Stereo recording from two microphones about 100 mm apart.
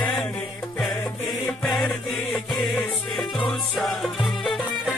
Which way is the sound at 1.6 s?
Centre (ahead or behind).